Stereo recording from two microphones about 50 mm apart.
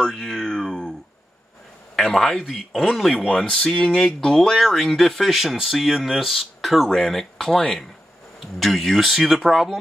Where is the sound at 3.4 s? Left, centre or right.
Centre.